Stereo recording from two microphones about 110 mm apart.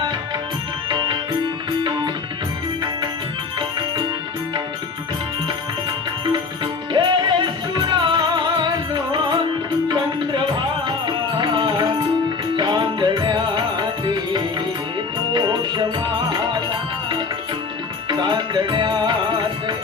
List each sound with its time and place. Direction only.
0.9 s music: 45° right (ahead or behind)
6.9 s music: 45° right (ahead or behind)
10.8 s music: 45° right (ahead or behind)
18.1 s music: 45° right (ahead or behind)